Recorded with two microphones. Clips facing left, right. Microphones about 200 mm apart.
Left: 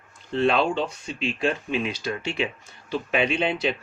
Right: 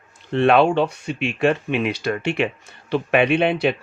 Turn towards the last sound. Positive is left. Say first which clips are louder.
# right 6 dB
turn(degrees=-60)  # may be behind; listen again after turning